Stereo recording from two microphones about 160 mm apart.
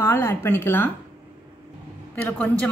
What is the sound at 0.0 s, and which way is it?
Speech, 15° left (ahead or behind).